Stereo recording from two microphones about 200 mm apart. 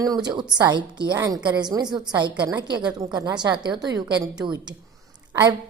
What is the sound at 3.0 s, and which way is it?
A woman's voice, 20° right (ahead or behind).